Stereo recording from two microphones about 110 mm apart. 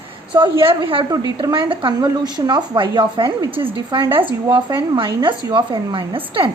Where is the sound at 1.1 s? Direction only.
35° right (ahead or behind).